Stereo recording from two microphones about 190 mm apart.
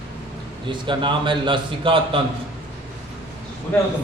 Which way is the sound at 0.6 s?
25° right (ahead or behind).